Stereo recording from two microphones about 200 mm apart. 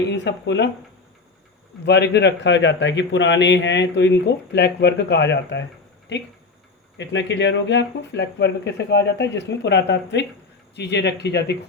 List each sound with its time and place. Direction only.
0.1 s a man's voice: 60° left (ahead or behind)
1.8 s a man's voice: 60° left (ahead or behind)